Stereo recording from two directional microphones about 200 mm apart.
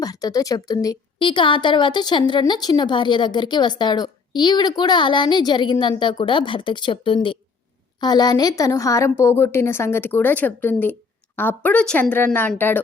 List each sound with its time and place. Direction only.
0.0 s a woman's voice: 20° left (ahead or behind)